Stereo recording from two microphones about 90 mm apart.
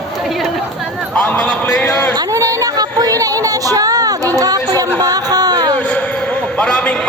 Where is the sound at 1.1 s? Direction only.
10° left (ahead or behind).